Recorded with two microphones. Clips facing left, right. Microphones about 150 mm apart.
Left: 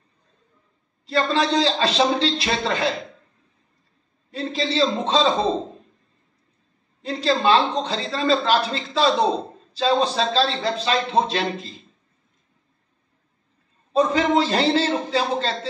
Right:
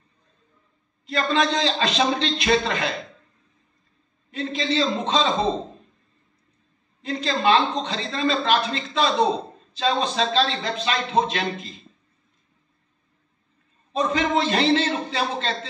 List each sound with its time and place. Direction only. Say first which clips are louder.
1.0 s a woman's voice: left 1 dB; 30° left (ahead or behind)
4.3 s a woman's voice: even; 35° left (ahead or behind)
7.0 s a woman's voice: left 3 dB; 30° left (ahead or behind)
13.9 s a woman's voice: left 4 dB; 35° left (ahead or behind)